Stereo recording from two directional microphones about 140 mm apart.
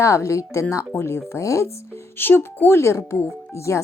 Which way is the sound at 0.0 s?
20° left (ahead or behind).